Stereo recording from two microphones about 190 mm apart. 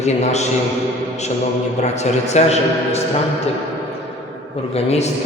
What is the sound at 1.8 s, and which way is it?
A man's voice, 35° left (ahead or behind).